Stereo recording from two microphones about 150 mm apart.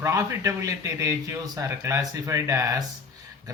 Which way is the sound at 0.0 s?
20° right (ahead or behind).